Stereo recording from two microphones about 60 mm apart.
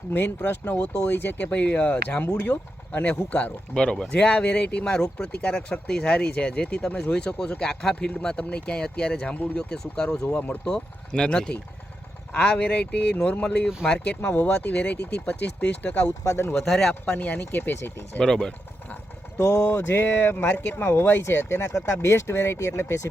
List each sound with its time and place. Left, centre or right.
0.1 s speech: left
3.8 s speech: centre
10.2 s speech: left
10.7 s speech: centre
13.8 s speech: centre
14.2 s speech: left
16.6 s speech: centre
16.9 s speech: left
17.7 s speech: left
18.2 s speech: centre
19.4 s speech: left
19.7 s speech: left